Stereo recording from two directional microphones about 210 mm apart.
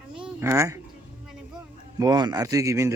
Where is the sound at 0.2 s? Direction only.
15° right (ahead or behind).